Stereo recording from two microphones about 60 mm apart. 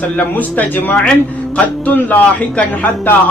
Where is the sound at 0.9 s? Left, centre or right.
Centre.